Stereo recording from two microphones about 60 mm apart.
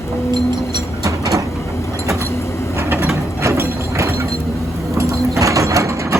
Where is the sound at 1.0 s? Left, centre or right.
Right.